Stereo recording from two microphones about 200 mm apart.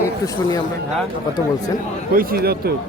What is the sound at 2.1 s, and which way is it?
Speech, 50° right (ahead or behind).